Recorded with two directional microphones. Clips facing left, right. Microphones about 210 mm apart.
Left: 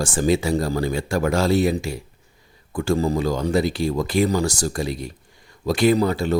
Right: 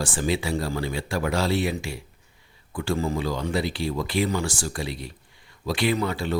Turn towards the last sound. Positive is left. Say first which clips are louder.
# left 7 dB
turn(degrees=40)  # may be behind; listen again after turning